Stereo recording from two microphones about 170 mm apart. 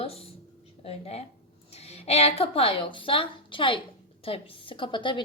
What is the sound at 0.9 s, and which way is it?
A woman's voice, 35° left (ahead or behind).